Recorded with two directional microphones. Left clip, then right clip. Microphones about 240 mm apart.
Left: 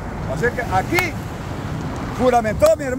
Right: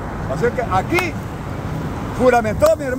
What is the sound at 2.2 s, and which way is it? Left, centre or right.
Speech, centre.